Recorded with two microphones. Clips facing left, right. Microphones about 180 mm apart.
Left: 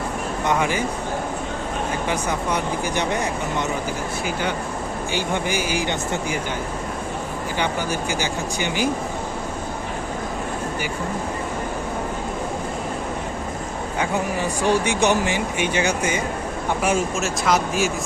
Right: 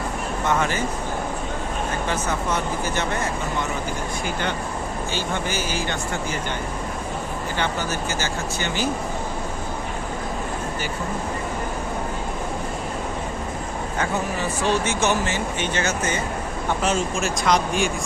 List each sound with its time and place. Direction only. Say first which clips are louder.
0.4 s speech: left 1 dB; 15° left (ahead or behind)
2.0 s speech: left 1 dB; 15° left (ahead or behind)
5.1 s speech: left 4 dB; 15° left (ahead or behind)
7.6 s speech: left 2 dB; 15° left (ahead or behind)
14.0 s speech: left 2 dB; 15° left (ahead or behind)